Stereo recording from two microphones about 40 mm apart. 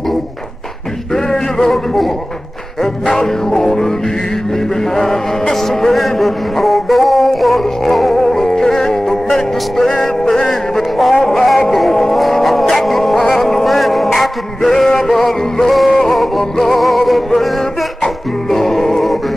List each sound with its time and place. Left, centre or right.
1.1 s music: centre
3.2 s music: centre
5.9 s a sound: centre
11.7 s music: centre